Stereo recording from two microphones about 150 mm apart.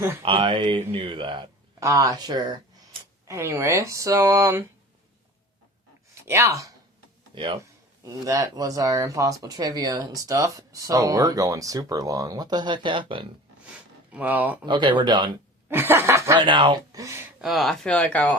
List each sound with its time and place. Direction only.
0.2 s speech: 35° right (ahead or behind)
1.8 s speech: 20° right (ahead or behind)
6.2 s speech: 20° right (ahead or behind)
7.3 s speech: 35° right (ahead or behind)
8.0 s speech: 20° right (ahead or behind)
13.7 s a sound: 10° right (ahead or behind)
14.6 s speech: 30° right (ahead or behind)
15.7 s snicker: 15° right (ahead or behind)
16.4 s speech: 30° right (ahead or behind)
17.4 s speech: centre (ahead or behind)